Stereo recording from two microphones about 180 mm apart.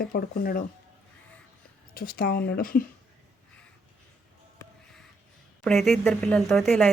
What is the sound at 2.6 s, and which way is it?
Speech, 50° left (ahead or behind).